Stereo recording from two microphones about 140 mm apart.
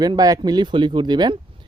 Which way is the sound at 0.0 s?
30° right (ahead or behind).